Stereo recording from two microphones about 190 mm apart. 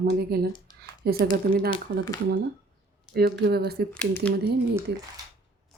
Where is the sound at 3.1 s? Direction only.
55° right (ahead or behind).